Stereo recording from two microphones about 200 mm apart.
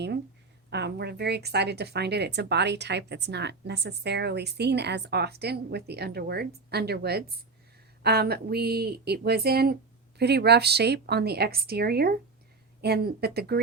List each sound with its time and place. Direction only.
0.7 s a woman's voice: 55° right (ahead or behind)